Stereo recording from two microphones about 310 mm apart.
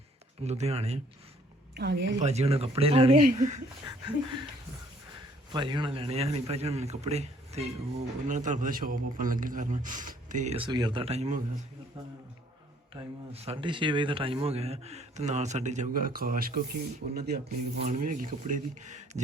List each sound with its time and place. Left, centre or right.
0.4 s a man's voice: right
1.7 s a woman's voice: right
2.2 s a man's voice: centre
5.5 s a man's voice: centre
13.3 s a man's voice: centre